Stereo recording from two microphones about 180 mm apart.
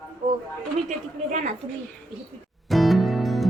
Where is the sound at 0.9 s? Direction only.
40° right (ahead or behind).